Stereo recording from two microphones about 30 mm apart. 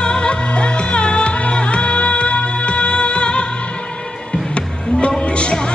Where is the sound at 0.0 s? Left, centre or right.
Left.